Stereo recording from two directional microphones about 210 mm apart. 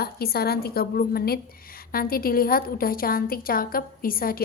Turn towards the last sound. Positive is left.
turn(degrees=45)  # may be behind; listen again after turning